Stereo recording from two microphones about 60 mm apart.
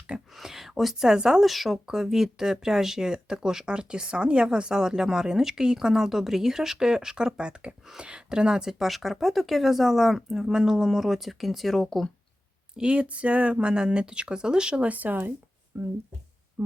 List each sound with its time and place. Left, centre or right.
0.3 s a woman's voice: centre
12.7 s a woman's voice: centre
15.7 s speech: right